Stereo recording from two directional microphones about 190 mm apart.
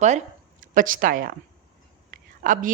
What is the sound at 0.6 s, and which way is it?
A woman's voice, 45° right (ahead or behind).